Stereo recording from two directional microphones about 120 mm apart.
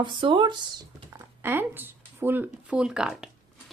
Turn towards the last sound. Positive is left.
turn(degrees=-5)  # may be behind; listen again after turning